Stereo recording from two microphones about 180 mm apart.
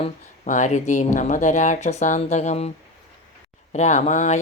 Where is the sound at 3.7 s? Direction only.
40° left (ahead or behind).